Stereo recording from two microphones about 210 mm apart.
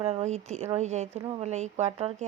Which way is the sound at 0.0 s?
30° right (ahead or behind).